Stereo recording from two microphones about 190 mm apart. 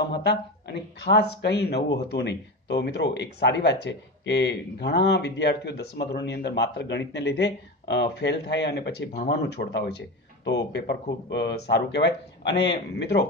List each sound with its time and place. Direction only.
0.2 s speech: 60° left (ahead or behind)